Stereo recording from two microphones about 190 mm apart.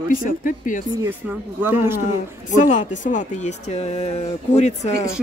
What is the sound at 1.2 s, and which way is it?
Speech, 10° right (ahead or behind).